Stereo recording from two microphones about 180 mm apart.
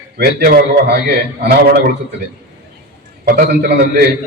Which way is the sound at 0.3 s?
55° right (ahead or behind).